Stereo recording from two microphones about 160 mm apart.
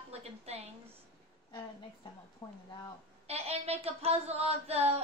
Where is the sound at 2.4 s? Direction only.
20° left (ahead or behind).